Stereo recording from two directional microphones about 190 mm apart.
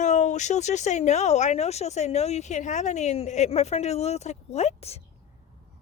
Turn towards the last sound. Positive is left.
turn(degrees=35)  # may be behind; listen again after turning